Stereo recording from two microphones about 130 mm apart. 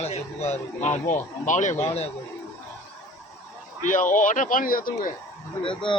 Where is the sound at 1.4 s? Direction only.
75° left (ahead or behind); by 2.1 s 55° left (ahead or behind).